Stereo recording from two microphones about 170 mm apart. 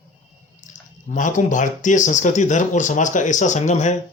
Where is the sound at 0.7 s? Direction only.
45° left (ahead or behind).